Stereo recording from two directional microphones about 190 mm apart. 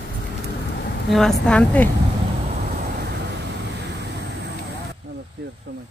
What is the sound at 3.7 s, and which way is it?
Vehicle, 65° right (ahead or behind).